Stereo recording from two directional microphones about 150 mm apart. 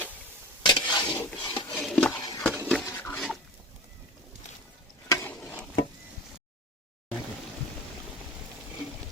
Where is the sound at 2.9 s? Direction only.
15° left (ahead or behind).